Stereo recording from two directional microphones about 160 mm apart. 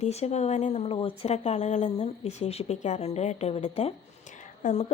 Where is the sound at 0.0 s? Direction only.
40° left (ahead or behind).